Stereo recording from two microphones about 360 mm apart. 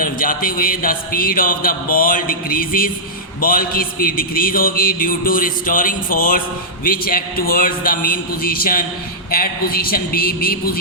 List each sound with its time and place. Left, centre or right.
0.0 s speech: left